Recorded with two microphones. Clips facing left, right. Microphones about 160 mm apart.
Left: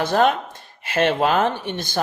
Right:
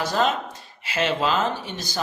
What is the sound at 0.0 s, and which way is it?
Speech, 55° left (ahead or behind).